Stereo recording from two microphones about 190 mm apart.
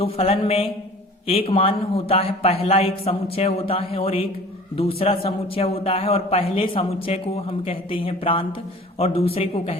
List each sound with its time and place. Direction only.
0.0 s a man's voice: 30° left (ahead or behind)